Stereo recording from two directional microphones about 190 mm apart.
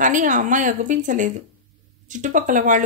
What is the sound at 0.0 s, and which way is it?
Speech, 40° right (ahead or behind).